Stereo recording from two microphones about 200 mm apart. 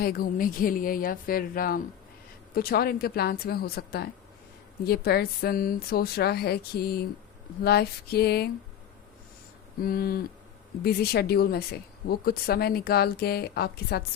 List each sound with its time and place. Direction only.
0.0 s speech: 50° left (ahead or behind)
9.8 s speech: 50° left (ahead or behind)